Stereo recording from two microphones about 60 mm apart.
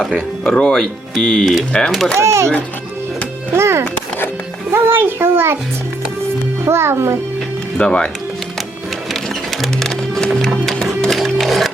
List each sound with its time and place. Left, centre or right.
0.4 s speech: centre
0.7 s speech: centre
1.2 s speech: centre
2.1 s a child's voice: right
3.5 s a child's voice: right
4.7 s a child's voice: right
6.7 s a child's voice: right
7.8 s speech: centre
9.6 s music: centre